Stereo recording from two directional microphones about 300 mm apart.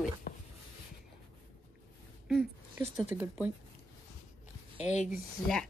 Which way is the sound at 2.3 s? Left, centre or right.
Centre.